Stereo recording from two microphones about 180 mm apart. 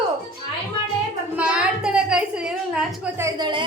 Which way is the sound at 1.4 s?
5° right (ahead or behind).